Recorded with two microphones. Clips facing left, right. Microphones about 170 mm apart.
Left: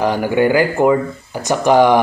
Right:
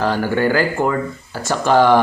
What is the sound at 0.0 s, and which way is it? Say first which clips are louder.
Speech: left 3 dB; 15° left (ahead or behind).